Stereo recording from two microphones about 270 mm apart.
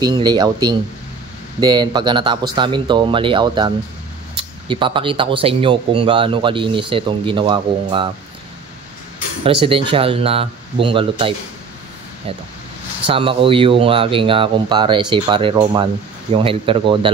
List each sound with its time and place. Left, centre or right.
0.0 s a man's voice: centre
9.4 s speech: centre
13.0 s speech: centre